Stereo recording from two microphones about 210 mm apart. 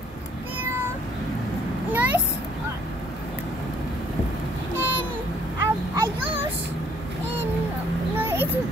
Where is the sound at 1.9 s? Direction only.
5° right (ahead or behind).